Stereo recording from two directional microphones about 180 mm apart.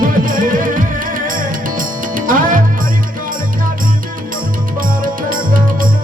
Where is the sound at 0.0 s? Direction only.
50° right (ahead or behind).